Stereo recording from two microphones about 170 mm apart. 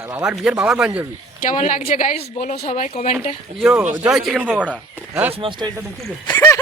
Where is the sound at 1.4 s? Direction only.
50° left (ahead or behind).